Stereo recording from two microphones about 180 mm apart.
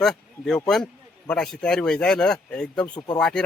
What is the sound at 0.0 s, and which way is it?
Speech, 5° left (ahead or behind).